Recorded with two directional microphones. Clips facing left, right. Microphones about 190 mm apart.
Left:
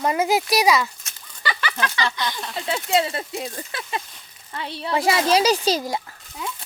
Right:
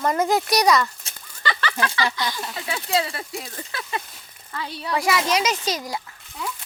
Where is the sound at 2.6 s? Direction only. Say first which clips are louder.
Left 3 dB; 20° left (ahead or behind).